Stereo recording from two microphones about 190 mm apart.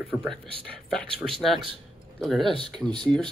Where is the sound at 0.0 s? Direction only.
Centre (ahead or behind).